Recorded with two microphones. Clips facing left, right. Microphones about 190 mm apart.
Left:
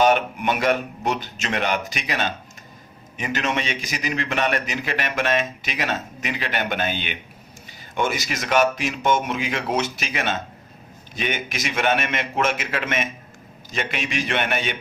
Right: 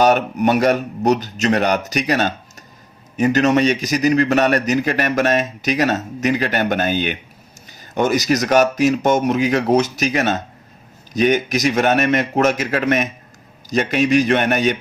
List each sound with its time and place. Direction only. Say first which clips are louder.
0.0 s a man's voice: right 4 dB; 40° right (ahead or behind)